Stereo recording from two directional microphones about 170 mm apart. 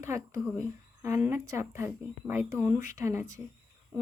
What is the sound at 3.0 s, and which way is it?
Speech, 15° right (ahead or behind).